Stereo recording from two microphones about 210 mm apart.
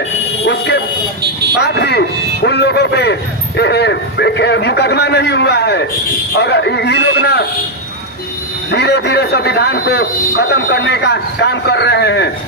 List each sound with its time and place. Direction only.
0.5 s a sound: 55° left (ahead or behind)
1.6 s a man's voice: 50° left (ahead or behind)
8.6 s a man's voice: 50° left (ahead or behind)